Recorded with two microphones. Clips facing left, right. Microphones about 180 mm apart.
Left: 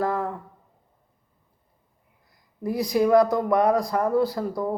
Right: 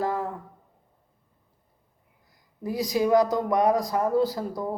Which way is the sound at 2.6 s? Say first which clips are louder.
Left 2 dB; 15° right (ahead or behind).